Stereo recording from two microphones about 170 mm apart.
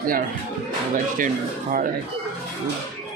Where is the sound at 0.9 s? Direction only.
50° right (ahead or behind).